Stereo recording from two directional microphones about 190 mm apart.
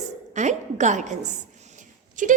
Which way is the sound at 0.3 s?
40° right (ahead or behind).